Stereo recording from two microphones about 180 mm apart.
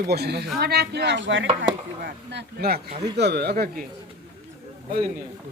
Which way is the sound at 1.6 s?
65° right (ahead or behind).